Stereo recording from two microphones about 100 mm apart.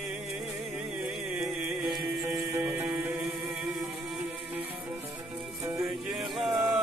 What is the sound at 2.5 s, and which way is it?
Music, 20° right (ahead or behind).